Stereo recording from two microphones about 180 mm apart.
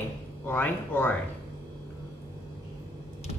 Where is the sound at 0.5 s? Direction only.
10° left (ahead or behind).